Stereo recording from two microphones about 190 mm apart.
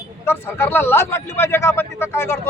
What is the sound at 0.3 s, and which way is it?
A man's voice, 10° left (ahead or behind).